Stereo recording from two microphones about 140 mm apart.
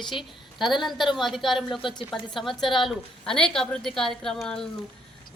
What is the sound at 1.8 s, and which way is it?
Speech, 35° left (ahead or behind).